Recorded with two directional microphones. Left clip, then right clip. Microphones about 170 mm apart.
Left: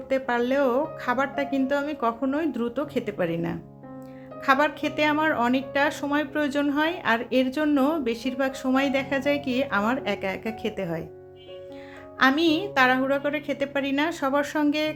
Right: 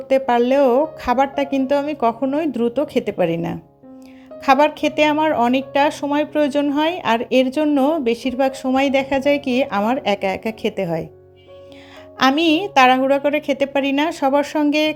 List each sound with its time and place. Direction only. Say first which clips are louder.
0.1 s speech: right 9 dB; 35° right (ahead or behind)
12.2 s speech: right 5 dB; 35° right (ahead or behind)